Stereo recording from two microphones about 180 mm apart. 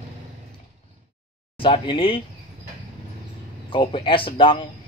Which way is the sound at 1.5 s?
30° left (ahead or behind).